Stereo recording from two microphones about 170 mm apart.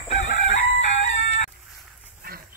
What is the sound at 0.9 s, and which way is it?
Chicken, 40° left (ahead or behind).